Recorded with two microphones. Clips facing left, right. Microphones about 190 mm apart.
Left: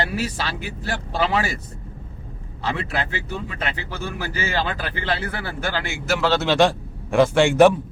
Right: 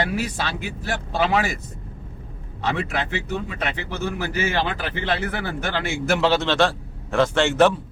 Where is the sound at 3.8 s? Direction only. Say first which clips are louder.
Right 3 dB; 20° right (ahead or behind).